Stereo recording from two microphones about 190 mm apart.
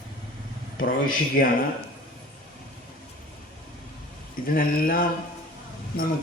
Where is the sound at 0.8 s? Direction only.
50° left (ahead or behind).